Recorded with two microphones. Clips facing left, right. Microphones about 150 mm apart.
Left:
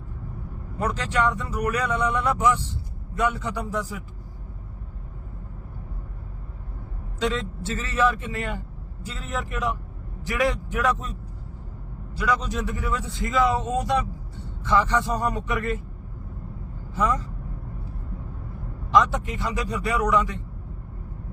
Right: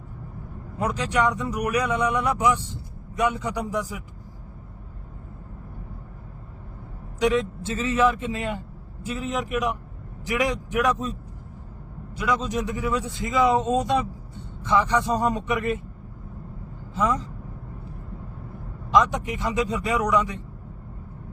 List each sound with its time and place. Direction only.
0.8 s speech: 15° right (ahead or behind)
7.2 s speech: 15° right (ahead or behind)
12.1 s speech: 20° right (ahead or behind)
16.9 s speech: 20° right (ahead or behind)
18.9 s speech: 15° right (ahead or behind)